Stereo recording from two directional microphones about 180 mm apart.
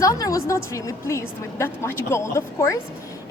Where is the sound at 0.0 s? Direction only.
20° left (ahead or behind).